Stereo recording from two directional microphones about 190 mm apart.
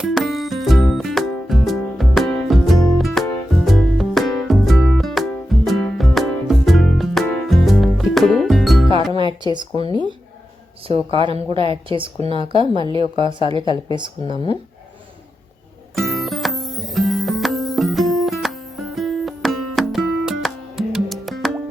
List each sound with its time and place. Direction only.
0.0 s music: centre (ahead or behind)
9.4 s speech: 25° right (ahead or behind)
14.3 s speech: 25° left (ahead or behind)
16.0 s music: centre (ahead or behind)